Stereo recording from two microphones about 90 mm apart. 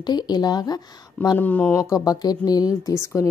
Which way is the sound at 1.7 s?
40° left (ahead or behind).